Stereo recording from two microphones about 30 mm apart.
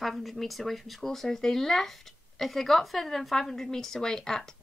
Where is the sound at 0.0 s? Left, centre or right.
Centre.